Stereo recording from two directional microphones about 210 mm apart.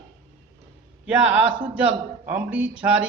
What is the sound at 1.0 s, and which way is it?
Speech, 5° right (ahead or behind).